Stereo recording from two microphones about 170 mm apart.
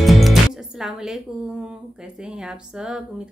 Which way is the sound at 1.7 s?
5° right (ahead or behind).